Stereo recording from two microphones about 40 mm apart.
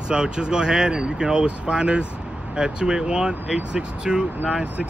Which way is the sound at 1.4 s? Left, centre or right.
Right.